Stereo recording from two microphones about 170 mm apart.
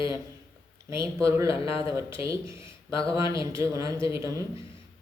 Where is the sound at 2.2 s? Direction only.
15° right (ahead or behind).